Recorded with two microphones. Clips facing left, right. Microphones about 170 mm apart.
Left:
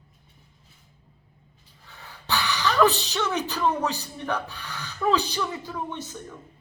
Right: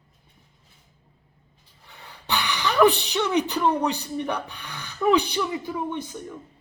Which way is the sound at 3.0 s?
15° right (ahead or behind).